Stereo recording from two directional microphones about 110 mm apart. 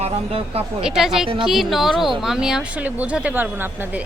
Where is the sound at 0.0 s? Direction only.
65° right (ahead or behind).